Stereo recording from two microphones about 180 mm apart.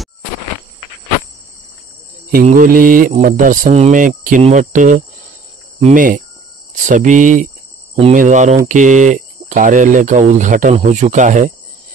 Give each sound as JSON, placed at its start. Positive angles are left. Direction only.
{"t": 2.3, "sound": "speech", "side_deg": -50}
{"t": 7.9, "sound": "cricket", "side_deg": -40}
{"t": 8.6, "sound": "speech", "side_deg": -45}